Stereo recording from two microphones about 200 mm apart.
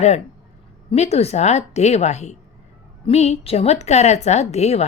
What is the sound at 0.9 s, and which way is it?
Speech, 30° left (ahead or behind).